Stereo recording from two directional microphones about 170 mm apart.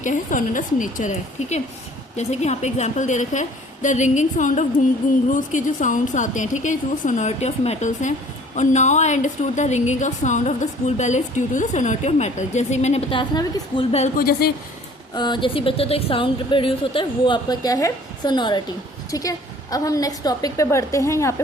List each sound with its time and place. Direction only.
0.0 s a woman's voice: 50° left (ahead or behind)
14.2 s a woman's voice: 60° left (ahead or behind)
15.1 s a woman's voice: 25° left (ahead or behind)